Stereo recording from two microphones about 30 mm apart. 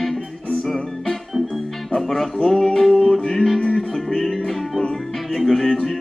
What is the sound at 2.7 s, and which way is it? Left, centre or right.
Music, centre.